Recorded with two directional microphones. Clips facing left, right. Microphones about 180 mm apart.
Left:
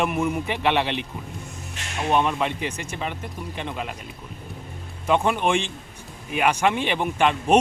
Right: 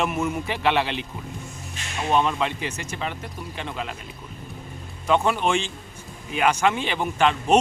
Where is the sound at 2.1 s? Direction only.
15° left (ahead or behind).